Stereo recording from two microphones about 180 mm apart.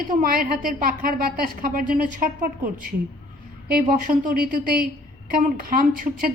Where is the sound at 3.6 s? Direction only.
50° right (ahead or behind).